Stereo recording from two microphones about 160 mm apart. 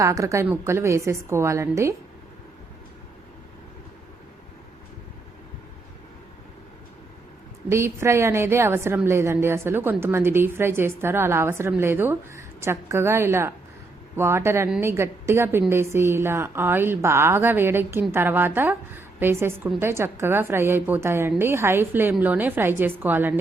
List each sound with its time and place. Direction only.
0.0 s a woman's voice: 20° right (ahead or behind)
7.7 s a woman's voice: 15° right (ahead or behind)